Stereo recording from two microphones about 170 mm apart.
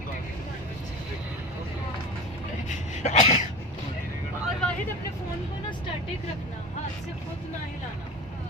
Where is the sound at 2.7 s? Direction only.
45° left (ahead or behind).